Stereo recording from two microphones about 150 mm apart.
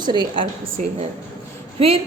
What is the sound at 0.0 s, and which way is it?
Speech, 30° right (ahead or behind).